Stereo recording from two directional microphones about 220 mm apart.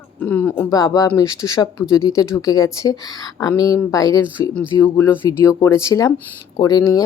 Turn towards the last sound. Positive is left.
turn(degrees=15)  # may be behind; listen again after turning